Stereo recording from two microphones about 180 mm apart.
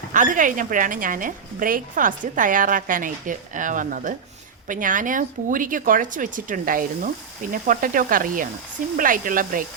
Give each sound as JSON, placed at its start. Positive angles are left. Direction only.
{"t": 0.1, "sound": "a woman's voice", "side_deg": -45}